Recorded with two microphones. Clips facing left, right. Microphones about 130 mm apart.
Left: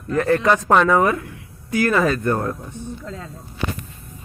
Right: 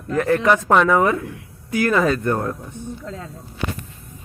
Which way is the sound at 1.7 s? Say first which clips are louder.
Left 1 dB; 15° right (ahead or behind).